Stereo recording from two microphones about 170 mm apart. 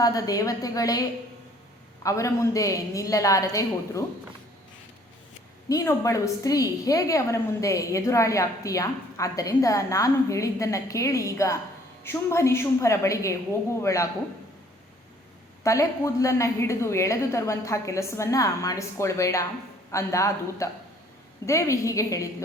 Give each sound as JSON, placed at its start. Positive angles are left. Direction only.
{"t": 0.0, "sound": "a woman's voice", "side_deg": 20}
{"t": 2.0, "sound": "a woman's voice", "side_deg": 20}
{"t": 5.6, "sound": "a woman's voice", "side_deg": 20}
{"t": 15.6, "sound": "a woman's voice", "side_deg": 20}